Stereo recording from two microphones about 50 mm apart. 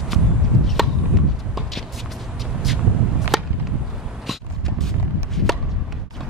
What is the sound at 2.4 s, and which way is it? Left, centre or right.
Whip, centre.